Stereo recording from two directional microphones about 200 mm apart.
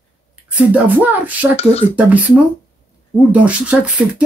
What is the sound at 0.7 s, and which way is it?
Speech, 10° right (ahead or behind).